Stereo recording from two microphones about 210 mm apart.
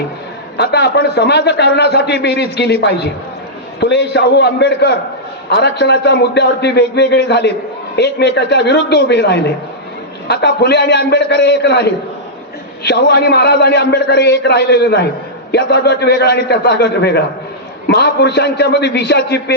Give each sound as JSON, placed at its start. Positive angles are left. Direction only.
{"t": 0.5, "sound": "a man's voice", "side_deg": 50}